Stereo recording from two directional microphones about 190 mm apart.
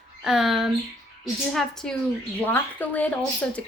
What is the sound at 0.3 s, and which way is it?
A woman's voice, 5° right (ahead or behind).